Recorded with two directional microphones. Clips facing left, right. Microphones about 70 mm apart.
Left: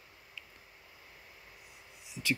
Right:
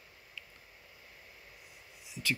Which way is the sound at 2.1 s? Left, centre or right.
Centre.